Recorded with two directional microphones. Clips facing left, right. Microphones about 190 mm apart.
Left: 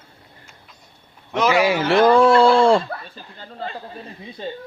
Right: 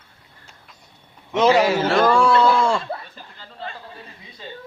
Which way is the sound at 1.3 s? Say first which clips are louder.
Right 3 dB; 25° right (ahead or behind).